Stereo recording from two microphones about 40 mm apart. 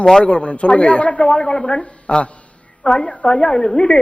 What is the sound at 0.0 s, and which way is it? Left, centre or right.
A woman's voice, centre.